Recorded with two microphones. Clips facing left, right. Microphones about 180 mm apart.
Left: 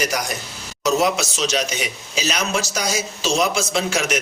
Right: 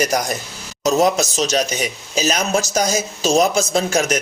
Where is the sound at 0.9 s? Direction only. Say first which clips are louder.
Right 3 dB; 45° right (ahead or behind).